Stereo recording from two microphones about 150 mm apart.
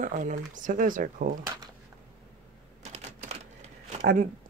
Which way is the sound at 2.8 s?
45° right (ahead or behind).